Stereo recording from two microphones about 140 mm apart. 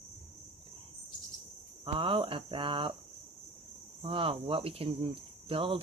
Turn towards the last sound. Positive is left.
turn(degrees=-40)  # may be behind; listen again after turning